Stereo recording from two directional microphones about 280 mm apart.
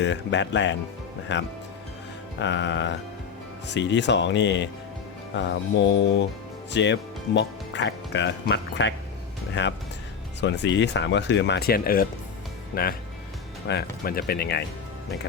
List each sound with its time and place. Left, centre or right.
0.0 s speech: left